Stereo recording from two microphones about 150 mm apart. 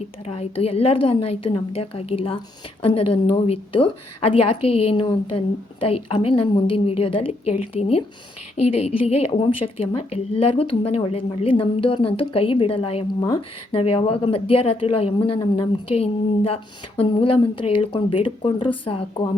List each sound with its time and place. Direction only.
0.3 s a woman's voice: 40° left (ahead or behind)
15.4 s a woman's voice: 30° left (ahead or behind)
16.0 s a woman's voice: 40° left (ahead or behind)